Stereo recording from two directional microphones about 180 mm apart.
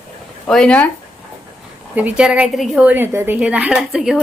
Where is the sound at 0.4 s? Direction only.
5° left (ahead or behind).